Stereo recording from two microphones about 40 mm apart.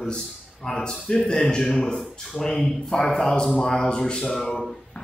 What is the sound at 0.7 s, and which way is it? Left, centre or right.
Speech, centre.